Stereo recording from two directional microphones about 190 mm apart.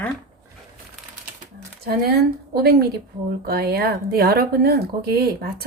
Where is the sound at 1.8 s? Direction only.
55° right (ahead or behind).